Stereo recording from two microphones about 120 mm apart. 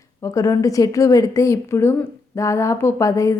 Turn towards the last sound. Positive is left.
turn(degrees=25)  # may be behind; listen again after turning